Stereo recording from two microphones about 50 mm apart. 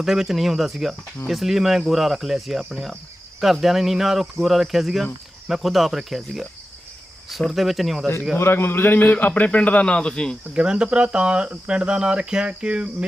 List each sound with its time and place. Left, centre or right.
0.0 s speech: centre
7.5 s speech: centre
8.4 s a man's voice: left; by 10.3 s centre
10.5 s speech: right